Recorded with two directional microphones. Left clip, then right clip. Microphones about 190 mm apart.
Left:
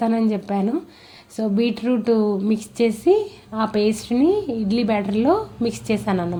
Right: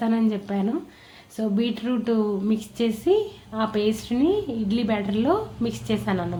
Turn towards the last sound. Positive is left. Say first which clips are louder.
# left 4 dB
turn(degrees=30)  # may be behind; listen again after turning